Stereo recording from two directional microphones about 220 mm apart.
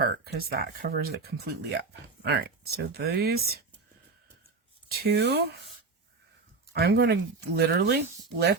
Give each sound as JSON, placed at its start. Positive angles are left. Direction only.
{"t": 0.0, "sound": "speech", "side_deg": -45}
{"t": 4.9, "sound": "speech", "side_deg": -45}
{"t": 6.7, "sound": "speech", "side_deg": -45}